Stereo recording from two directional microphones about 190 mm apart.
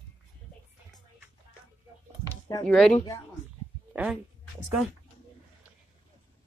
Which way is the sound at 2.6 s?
Centre (ahead or behind).